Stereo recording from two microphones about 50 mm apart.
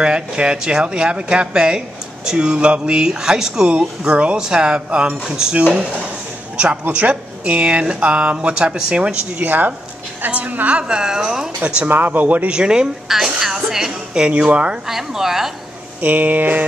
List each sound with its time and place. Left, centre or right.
0.0 s speech: centre
9.5 s a sound: right
10.2 s speech: right; by 11.5 s centre
11.9 s a sound: right
12.4 s a woman's voice: centre
13.4 s music: centre
14.3 s speech: right
14.9 s a woman's voice: centre
16.0 s a sound: right